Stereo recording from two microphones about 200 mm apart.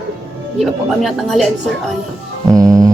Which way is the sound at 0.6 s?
Centre (ahead or behind).